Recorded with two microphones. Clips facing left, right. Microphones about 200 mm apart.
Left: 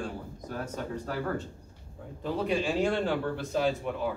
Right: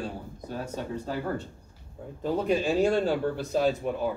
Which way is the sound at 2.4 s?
40° right (ahead or behind).